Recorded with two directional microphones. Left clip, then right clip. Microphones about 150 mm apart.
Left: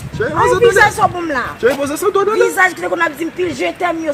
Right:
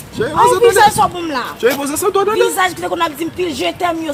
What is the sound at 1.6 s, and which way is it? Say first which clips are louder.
Speech: even; 5° right (ahead or behind).